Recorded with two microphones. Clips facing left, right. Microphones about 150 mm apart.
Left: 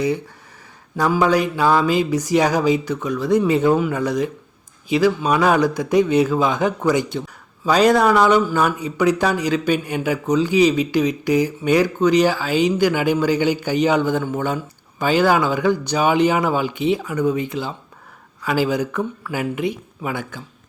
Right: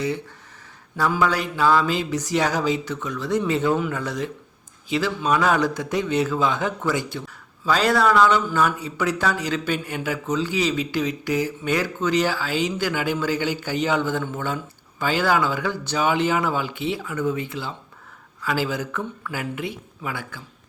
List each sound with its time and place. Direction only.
1.3 s speech: 15° left (ahead or behind)